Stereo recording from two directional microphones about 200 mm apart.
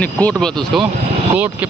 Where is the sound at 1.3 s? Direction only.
5° right (ahead or behind).